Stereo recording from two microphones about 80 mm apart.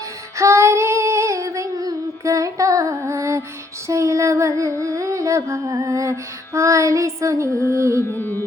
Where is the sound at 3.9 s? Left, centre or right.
Right.